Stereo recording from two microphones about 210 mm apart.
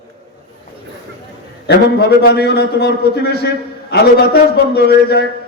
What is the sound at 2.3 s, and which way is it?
A man's voice, 50° left (ahead or behind).